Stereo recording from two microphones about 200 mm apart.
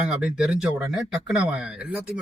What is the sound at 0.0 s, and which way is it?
A man's voice, 5° right (ahead or behind).